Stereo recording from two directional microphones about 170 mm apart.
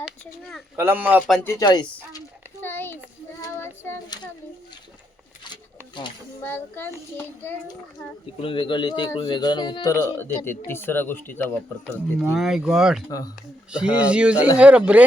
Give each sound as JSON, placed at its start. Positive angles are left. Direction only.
{"t": 0.8, "sound": "speech", "side_deg": -10}
{"t": 1.5, "sound": "speech", "side_deg": 20}
{"t": 2.1, "sound": "a sound", "side_deg": 10}
{"t": 6.4, "sound": "speech", "side_deg": 10}
{"t": 8.4, "sound": "speech", "side_deg": 30}
{"t": 12.2, "sound": "speech", "side_deg": -5}
{"t": 13.1, "sound": "speech", "side_deg": 20}
{"t": 13.7, "sound": "speech", "side_deg": -5}